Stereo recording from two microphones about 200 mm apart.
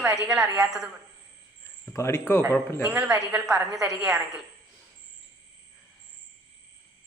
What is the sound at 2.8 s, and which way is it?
A woman's voice, 5° right (ahead or behind).